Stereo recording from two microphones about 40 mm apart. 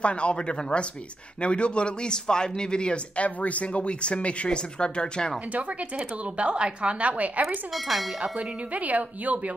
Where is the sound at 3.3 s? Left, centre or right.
Left.